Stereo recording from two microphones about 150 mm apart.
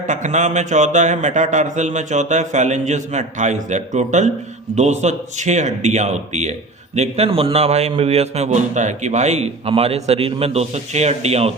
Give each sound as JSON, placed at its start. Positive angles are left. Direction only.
{"t": 0.1, "sound": "a man's voice", "side_deg": -55}